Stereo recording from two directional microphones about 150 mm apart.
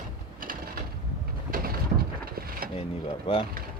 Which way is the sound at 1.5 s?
80° right.